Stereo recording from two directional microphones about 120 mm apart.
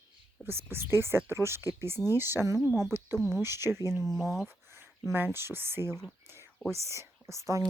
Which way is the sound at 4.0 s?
Centre (ahead or behind).